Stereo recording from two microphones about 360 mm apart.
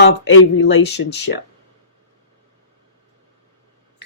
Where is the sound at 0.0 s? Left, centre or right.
Left.